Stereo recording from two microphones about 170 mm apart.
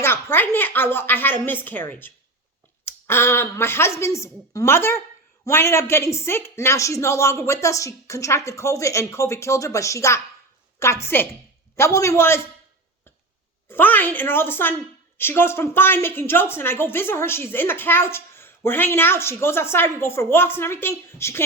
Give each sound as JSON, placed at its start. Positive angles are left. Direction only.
{"t": 0.0, "sound": "a woman's voice", "side_deg": 15}
{"t": 13.7, "sound": "a woman's voice", "side_deg": 10}